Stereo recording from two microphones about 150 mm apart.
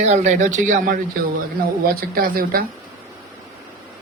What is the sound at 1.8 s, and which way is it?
Speech, 80° right.